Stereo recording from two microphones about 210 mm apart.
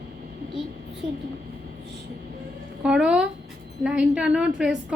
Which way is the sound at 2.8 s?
5° right (ahead or behind).